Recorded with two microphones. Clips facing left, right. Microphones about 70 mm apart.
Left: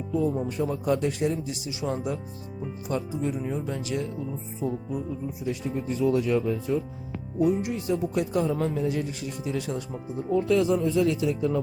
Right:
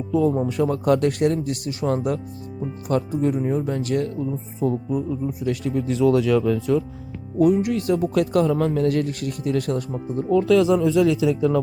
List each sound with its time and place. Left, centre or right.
0.1 s speech: right
0.5 s speech: right
7.3 s speech: right
10.2 s speech: right